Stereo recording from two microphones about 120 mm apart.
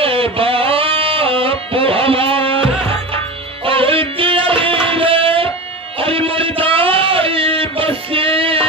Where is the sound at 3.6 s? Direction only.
50° right (ahead or behind).